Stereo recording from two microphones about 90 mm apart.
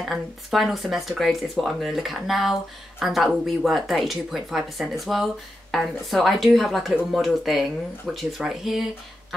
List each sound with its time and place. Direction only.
0.0 s a woman's voice: centre (ahead or behind)